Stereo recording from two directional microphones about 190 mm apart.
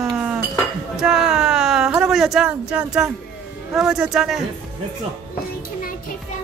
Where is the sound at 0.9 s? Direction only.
5° right (ahead or behind).